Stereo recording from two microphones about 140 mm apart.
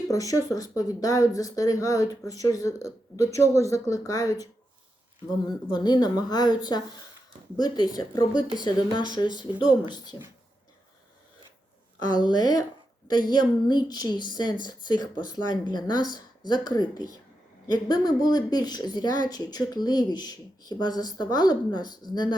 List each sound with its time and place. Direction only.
0.1 s speech: 25° left (ahead or behind)
5.8 s a woman's voice: 30° left (ahead or behind)
11.9 s a woman's voice: 30° left (ahead or behind)